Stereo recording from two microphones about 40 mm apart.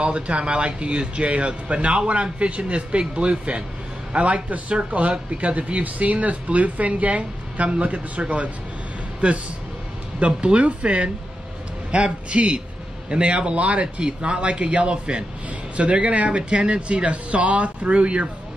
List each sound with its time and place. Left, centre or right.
0.0 s a man's voice: right